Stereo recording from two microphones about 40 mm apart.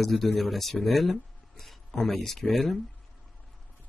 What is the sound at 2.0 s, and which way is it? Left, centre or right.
Speech, centre.